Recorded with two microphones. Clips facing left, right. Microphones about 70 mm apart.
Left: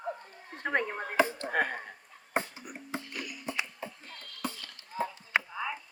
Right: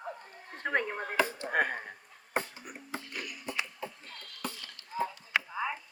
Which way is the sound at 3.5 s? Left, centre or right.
Left.